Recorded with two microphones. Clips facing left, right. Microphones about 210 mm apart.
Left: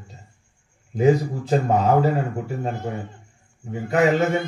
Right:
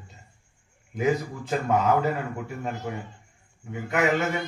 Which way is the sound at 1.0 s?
30° left (ahead or behind).